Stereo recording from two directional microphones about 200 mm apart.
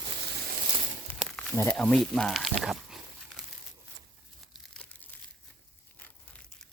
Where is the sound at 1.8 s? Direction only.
Centre (ahead or behind).